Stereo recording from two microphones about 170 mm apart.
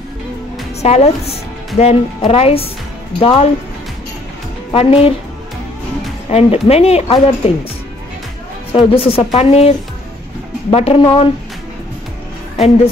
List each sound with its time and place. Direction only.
0.8 s speech: 40° left (ahead or behind)
4.7 s speech: 35° left (ahead or behind)
6.3 s speech: 35° left (ahead or behind)
8.7 s speech: 35° left (ahead or behind)